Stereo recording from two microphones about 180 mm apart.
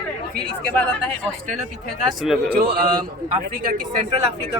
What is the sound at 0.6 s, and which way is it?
Speech, 10° left (ahead or behind).